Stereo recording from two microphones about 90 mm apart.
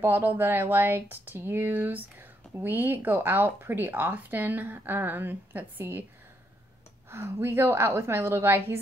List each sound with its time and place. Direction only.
0.0 s speech: 20° right (ahead or behind)
7.1 s speech: 30° right (ahead or behind)